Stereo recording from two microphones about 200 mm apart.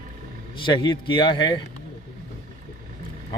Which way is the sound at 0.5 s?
25° left (ahead or behind).